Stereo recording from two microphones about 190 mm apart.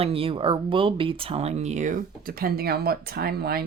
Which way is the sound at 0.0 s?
30° right (ahead or behind).